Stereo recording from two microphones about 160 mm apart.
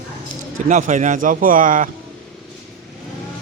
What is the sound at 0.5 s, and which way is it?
Speech, 50° right (ahead or behind).